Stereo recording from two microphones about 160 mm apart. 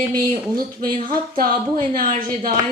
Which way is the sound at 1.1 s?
65° right (ahead or behind).